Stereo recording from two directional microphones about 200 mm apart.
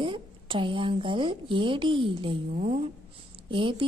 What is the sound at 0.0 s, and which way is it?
A woman's voice, 25° right (ahead or behind).